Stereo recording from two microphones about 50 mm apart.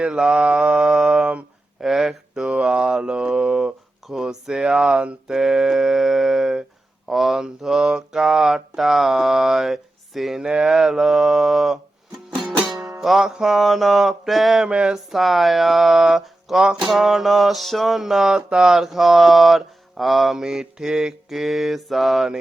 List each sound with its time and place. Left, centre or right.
0.1 s mantra: centre
1.2 s a sound: right
1.8 s mantra: centre
4.1 s speech: centre
5.3 s a sound: centre
7.1 s mantra: centre
12.6 s music: centre
13.3 s mantra: centre
13.6 s speech: centre
14.7 s a sound: centre
15.1 s speech: centre
20.4 s speech: centre